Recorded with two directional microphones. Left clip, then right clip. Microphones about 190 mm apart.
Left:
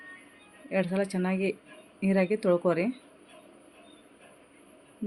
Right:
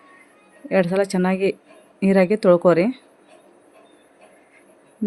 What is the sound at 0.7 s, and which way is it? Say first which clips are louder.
Speech: right 10 dB; 75° right (ahead or behind).